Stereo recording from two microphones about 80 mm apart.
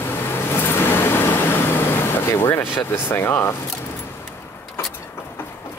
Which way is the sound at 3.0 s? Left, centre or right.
Left.